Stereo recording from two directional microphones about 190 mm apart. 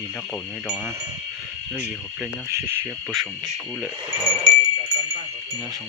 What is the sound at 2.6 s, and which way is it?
Speech, 10° right (ahead or behind).